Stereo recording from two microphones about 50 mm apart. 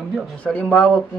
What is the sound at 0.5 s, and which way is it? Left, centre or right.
Speech, left.